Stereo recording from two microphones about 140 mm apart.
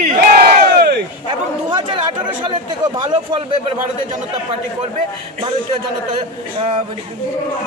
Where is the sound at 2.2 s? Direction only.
35° right (ahead or behind).